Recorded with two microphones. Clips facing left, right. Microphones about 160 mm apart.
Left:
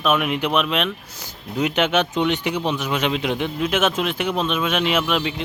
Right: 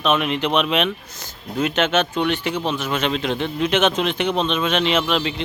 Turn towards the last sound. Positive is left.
turn(degrees=10)  # may be behind; listen again after turning